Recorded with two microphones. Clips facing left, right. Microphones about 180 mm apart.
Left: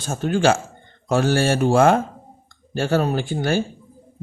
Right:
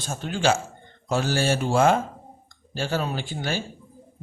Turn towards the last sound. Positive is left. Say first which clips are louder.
# left 7 dB
turn(degrees=50)  # may be behind; listen again after turning